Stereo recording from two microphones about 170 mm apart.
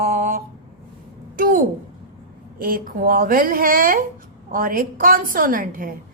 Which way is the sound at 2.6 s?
55° right (ahead or behind).